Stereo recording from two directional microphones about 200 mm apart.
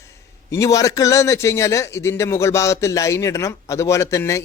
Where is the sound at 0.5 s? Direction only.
15° left (ahead or behind).